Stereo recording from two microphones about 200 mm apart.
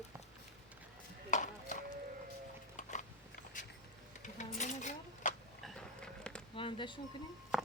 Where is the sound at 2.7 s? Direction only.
35° left (ahead or behind).